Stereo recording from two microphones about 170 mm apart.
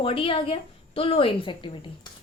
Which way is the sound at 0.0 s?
30° left (ahead or behind).